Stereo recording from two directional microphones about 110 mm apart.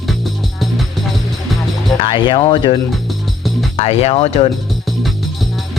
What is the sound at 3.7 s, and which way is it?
Speech, 70° left (ahead or behind).